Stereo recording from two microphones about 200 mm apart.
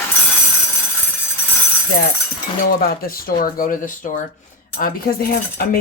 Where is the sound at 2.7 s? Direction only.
45° left (ahead or behind).